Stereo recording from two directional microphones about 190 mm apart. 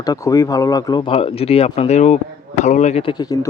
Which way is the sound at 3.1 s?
20° left (ahead or behind).